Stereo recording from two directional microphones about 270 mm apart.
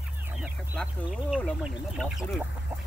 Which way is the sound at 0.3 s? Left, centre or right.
Centre.